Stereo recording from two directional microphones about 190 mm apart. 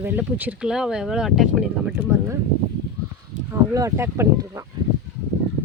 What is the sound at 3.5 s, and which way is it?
Speech, 15° right (ahead or behind).